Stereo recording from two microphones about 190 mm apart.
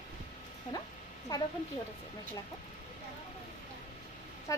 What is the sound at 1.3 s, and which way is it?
Speech, 20° left (ahead or behind).